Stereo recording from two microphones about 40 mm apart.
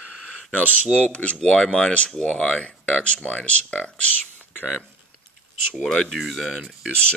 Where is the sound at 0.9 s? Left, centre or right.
Left.